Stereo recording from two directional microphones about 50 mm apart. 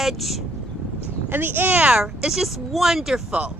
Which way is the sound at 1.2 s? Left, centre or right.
Right.